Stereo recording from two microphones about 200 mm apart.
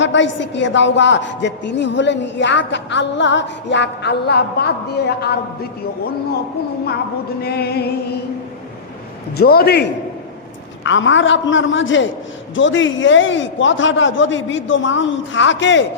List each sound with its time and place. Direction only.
0.0 s a woman's voice: 65° left (ahead or behind)
7.4 s a man's voice: 55° left (ahead or behind)
9.4 s a man's voice: 50° left (ahead or behind)
10.8 s a man's voice: 70° left (ahead or behind)